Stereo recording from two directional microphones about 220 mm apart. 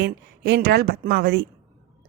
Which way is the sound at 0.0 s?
50° right (ahead or behind).